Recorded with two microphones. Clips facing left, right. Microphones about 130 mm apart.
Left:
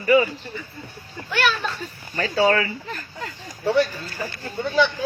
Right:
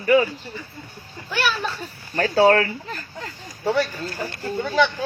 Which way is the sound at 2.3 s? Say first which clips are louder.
Right 3 dB; 60° right (ahead or behind).